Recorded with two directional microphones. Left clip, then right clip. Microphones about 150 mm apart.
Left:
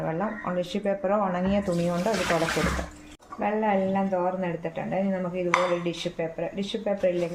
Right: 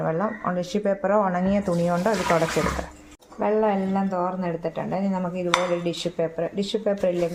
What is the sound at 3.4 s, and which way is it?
Dishes, 30° right (ahead or behind).